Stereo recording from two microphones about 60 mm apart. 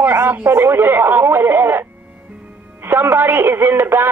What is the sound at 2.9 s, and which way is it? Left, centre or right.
Speech, right.